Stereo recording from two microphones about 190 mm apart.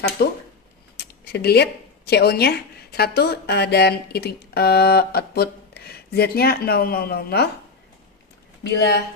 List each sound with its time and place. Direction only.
0.2 s speech: 60° left (ahead or behind)
8.6 s speech: 60° left (ahead or behind)